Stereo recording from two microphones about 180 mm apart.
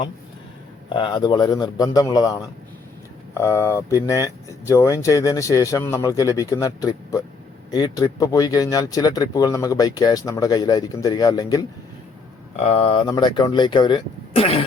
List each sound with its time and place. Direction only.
0.9 s speech: 25° left (ahead or behind)
12.5 s speech: 35° left (ahead or behind)